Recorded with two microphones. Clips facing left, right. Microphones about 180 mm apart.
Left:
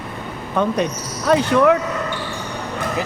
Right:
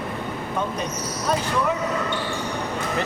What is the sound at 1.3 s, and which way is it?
Speech, 70° left (ahead or behind).